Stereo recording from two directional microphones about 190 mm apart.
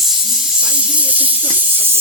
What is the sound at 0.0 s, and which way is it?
Snake, centre (ahead or behind).